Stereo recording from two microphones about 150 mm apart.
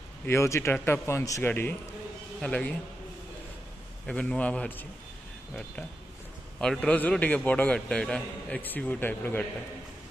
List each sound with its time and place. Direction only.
0.3 s a man's voice: 20° left (ahead or behind)
4.0 s a man's voice: 5° left (ahead or behind)
6.6 s a man's voice: 5° left (ahead or behind)